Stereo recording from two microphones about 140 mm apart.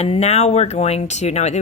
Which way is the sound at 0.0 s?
45° left (ahead or behind).